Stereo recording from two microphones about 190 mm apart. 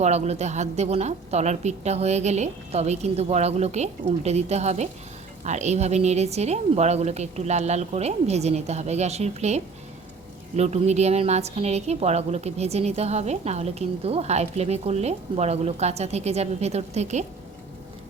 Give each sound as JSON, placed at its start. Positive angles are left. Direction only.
{"t": 0.0, "sound": "a woman's voice", "side_deg": -35}
{"t": 10.6, "sound": "a woman's voice", "side_deg": -35}